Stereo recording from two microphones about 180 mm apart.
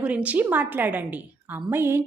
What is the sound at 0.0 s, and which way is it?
A woman's voice, 5° right (ahead or behind).